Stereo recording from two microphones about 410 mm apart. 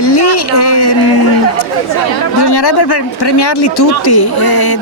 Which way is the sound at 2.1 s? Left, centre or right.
Left.